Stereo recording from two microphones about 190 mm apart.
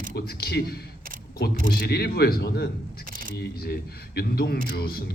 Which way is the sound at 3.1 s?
50° right (ahead or behind).